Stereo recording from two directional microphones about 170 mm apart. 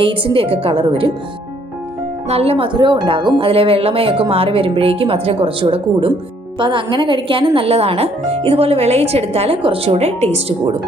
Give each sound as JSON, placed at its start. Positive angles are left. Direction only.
{"t": 0.0, "sound": "speech", "side_deg": -30}
{"t": 2.2, "sound": "speech", "side_deg": -35}